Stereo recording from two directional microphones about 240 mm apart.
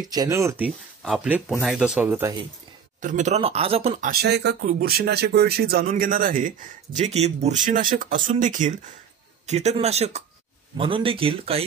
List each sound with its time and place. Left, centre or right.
0.0 s speech: centre
3.0 s speech: right
4.1 s speech: right